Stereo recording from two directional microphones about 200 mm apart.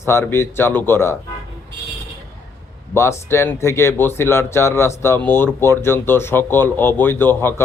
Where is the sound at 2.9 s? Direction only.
15° left (ahead or behind).